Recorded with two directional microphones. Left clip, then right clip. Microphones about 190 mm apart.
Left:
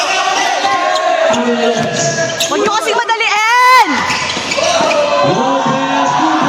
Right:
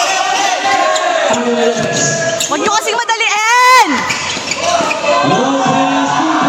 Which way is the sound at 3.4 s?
15° right (ahead or behind).